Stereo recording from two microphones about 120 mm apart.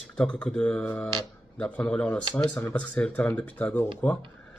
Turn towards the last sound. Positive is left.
turn(degrees=15)  # may be behind; listen again after turning